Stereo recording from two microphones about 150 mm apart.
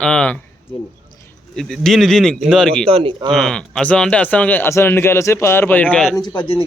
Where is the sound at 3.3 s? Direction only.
5° left (ahead or behind).